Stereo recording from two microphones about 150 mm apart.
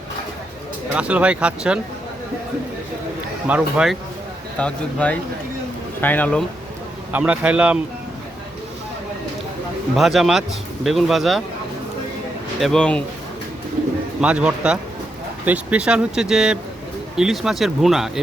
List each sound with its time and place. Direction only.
0.9 s speech: 10° right (ahead or behind)
3.4 s speech: 5° right (ahead or behind)
4.5 s speech: 10° left (ahead or behind)
7.1 s speech: 10° right (ahead or behind)
9.9 s speech: centre (ahead or behind)
12.5 s speech: 5° left (ahead or behind)
14.2 s speech: 5° right (ahead or behind)